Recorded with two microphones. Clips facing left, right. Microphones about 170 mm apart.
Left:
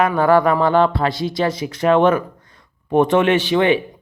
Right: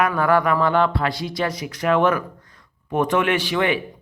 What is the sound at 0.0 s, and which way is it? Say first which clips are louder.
Speech: left 4 dB; 30° left (ahead or behind).